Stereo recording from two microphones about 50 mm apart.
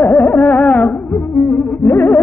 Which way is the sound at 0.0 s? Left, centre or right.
Left.